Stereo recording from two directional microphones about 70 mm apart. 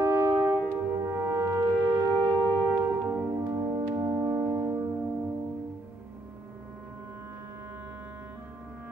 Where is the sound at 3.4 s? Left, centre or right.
Right.